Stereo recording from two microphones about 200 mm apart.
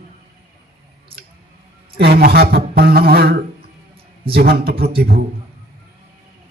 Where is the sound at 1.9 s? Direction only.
50° right (ahead or behind).